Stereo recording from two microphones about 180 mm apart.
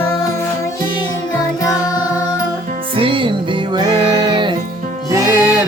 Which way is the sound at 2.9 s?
30° right (ahead or behind).